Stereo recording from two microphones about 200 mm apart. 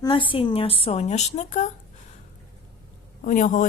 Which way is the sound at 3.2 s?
40° left (ahead or behind).